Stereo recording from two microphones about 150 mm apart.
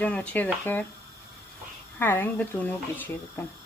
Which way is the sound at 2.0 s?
15° left (ahead or behind).